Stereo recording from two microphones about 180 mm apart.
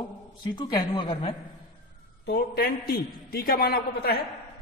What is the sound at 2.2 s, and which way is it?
A man's voice, 60° left (ahead or behind).